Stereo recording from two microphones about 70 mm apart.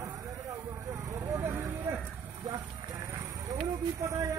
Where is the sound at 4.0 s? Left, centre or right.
Right.